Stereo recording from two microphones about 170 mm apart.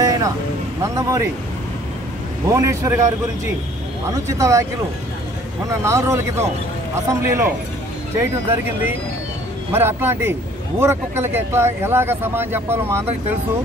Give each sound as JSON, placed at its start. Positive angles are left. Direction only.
{"t": 0.0, "sound": "music", "side_deg": -20}
{"t": 0.8, "sound": "speech", "side_deg": -20}
{"t": 2.5, "sound": "speech", "side_deg": -15}
{"t": 4.3, "sound": "speech", "side_deg": -20}
{"t": 5.7, "sound": "speech", "side_deg": -15}